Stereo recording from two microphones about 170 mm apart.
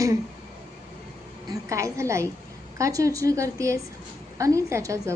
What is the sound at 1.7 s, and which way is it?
A woman's voice, 15° right (ahead or behind).